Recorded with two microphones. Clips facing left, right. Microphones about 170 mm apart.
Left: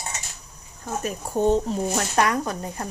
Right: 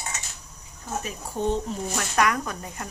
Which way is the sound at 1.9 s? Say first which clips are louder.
Even; 30° left (ahead or behind).